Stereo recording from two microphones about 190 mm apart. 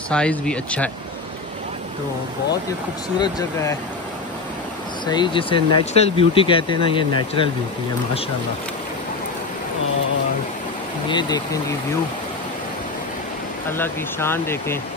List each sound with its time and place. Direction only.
0.1 s speech: 5° left (ahead or behind)
3.2 s speech: 20° left (ahead or behind)
5.0 s speech: 25° left (ahead or behind)
11.1 s speech: 20° left (ahead or behind)
13.7 s speech: 10° left (ahead or behind)